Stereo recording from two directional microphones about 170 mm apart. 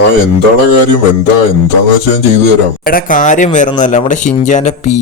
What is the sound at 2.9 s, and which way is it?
Speech, 55° left (ahead or behind).